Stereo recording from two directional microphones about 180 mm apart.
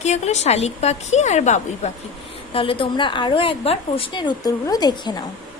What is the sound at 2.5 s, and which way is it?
A woman's voice, 30° left (ahead or behind).